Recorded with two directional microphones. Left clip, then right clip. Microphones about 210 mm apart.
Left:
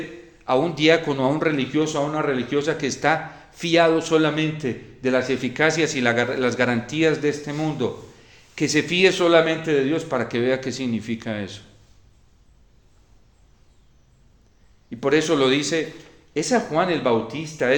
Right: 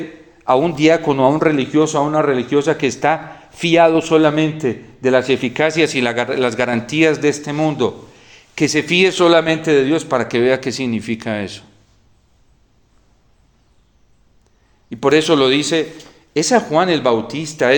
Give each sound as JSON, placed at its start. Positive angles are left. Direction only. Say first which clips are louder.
{"t": 0.4, "sound": "a man's voice", "louder": "right 5 dB", "side_deg": -30}
{"t": 14.8, "sound": "a man's voice", "louder": "right 6 dB", "side_deg": -35}